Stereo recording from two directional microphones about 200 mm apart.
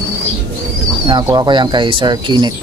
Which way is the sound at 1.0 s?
20° right (ahead or behind).